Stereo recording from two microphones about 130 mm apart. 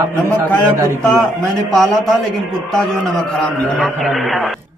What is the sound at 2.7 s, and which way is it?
A man's voice, 5° left (ahead or behind).